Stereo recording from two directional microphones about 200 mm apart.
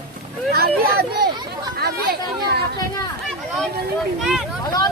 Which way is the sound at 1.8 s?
50° right (ahead or behind).